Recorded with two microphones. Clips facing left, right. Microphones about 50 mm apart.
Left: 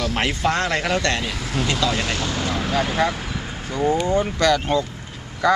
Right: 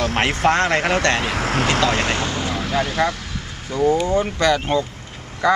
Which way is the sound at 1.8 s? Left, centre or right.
Right.